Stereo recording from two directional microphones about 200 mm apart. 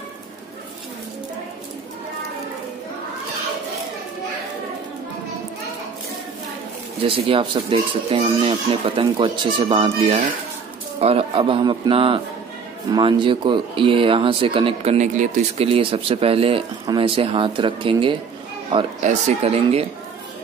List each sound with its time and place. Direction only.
7.1 s speech: 25° right (ahead or behind)